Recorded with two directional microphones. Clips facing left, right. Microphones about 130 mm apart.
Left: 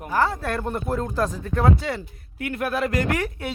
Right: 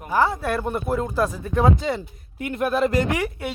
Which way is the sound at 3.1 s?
10° right (ahead or behind).